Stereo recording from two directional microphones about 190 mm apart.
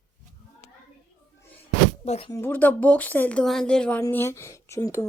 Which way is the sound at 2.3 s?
10° left (ahead or behind).